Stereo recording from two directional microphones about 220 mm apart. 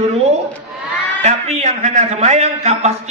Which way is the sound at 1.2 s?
30° right (ahead or behind).